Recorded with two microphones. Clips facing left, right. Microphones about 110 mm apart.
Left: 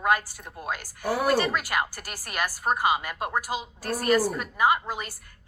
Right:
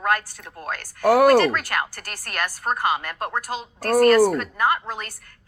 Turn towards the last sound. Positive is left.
turn(degrees=10)  # may be behind; listen again after turning